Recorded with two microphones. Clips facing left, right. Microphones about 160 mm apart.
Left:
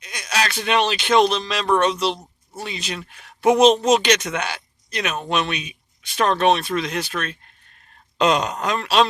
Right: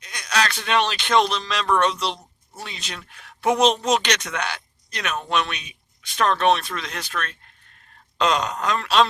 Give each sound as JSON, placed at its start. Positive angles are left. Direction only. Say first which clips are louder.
{"t": 0.0, "sound": "speech", "louder": "even", "side_deg": 5}